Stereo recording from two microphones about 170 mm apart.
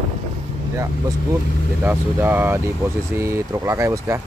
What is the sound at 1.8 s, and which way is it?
Speech, 10° right (ahead or behind).